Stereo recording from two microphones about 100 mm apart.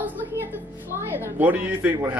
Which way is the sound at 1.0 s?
20° right (ahead or behind).